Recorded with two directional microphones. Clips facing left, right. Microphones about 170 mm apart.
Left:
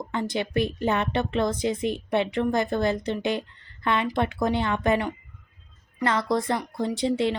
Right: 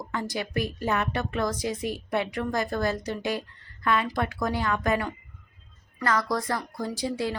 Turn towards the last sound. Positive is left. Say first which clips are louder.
# left 5 dB
turn(degrees=25)  # may be behind; listen again after turning